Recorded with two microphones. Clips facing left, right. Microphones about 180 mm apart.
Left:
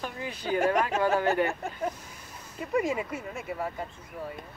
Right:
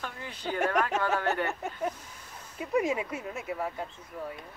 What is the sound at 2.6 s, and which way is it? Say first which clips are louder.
Speech: even; centre (ahead or behind).